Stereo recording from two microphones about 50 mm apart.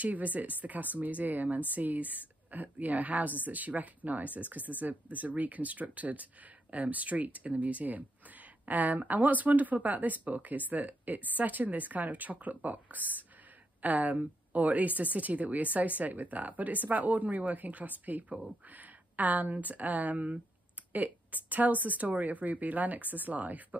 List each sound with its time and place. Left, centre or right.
0.0 s speech: right